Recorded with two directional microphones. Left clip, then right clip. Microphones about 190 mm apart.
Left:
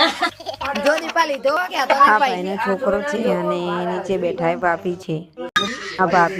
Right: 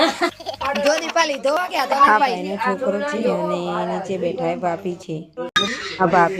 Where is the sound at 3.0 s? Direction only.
15° left (ahead or behind).